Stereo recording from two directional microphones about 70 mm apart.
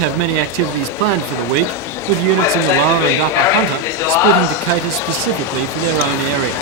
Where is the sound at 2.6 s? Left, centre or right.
Left.